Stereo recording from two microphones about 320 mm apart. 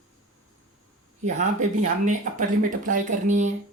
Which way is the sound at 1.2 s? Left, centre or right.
Right.